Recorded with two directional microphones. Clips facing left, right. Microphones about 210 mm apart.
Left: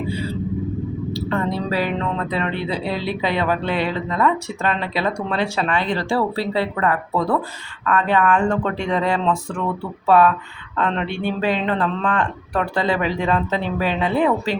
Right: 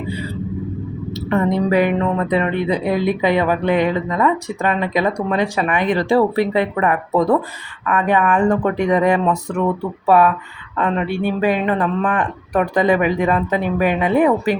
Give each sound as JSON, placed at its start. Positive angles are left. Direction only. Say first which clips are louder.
{"t": 1.1, "sound": "speech", "louder": "right 6 dB", "side_deg": -20}
{"t": 2.8, "sound": "speech", "louder": "right 6 dB", "side_deg": -50}
{"t": 3.2, "sound": "speech", "louder": "right 4 dB", "side_deg": -15}